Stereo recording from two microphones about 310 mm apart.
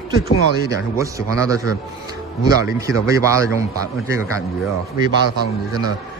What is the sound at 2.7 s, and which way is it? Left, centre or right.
Speech, centre.